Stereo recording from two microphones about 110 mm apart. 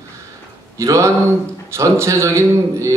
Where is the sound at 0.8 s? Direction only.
30° right (ahead or behind).